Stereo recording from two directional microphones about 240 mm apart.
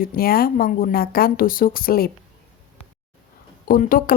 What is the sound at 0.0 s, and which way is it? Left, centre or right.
A woman's voice, left.